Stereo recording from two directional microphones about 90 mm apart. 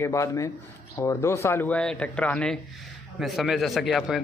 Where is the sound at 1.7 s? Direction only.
10° left (ahead or behind).